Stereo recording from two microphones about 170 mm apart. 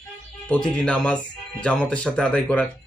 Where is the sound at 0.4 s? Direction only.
5° left (ahead or behind).